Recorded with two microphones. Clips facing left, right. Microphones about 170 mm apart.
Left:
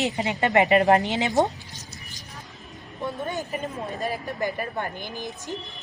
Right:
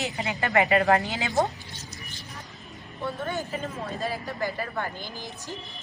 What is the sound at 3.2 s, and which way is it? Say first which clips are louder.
A woman's voice: left 1 dB; 15° left (ahead or behind).